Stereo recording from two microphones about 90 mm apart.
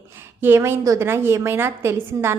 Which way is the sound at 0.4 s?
25° right (ahead or behind).